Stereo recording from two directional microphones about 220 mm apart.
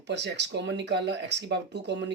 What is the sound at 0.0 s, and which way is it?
Speech, 50° right (ahead or behind).